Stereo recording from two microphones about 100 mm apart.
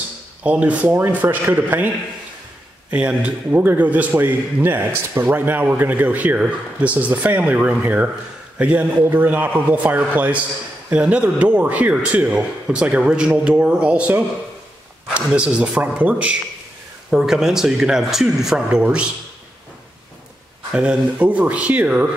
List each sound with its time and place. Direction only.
0.4 s a man's voice: 15° right (ahead or behind)
2.9 s a man's voice: 15° right (ahead or behind)
20.7 s a man's voice: 10° right (ahead or behind)